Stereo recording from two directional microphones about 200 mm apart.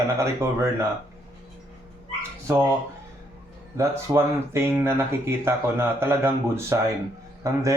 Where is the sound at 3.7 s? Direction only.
15° right (ahead or behind).